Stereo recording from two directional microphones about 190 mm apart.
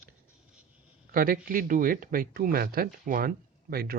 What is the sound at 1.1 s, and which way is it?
Speech, 50° right (ahead or behind).